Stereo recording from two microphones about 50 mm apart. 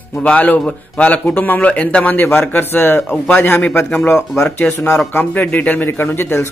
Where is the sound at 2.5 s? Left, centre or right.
Left.